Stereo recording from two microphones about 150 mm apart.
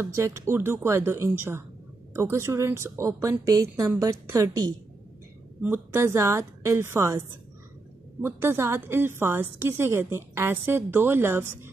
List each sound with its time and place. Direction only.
0.0 s a woman's voice: 20° right (ahead or behind)
5.6 s a woman's voice: 15° right (ahead or behind)